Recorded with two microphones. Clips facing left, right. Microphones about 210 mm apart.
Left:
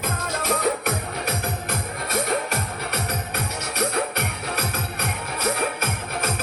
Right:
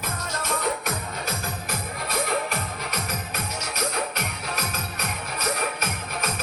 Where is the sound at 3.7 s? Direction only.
60° left (ahead or behind).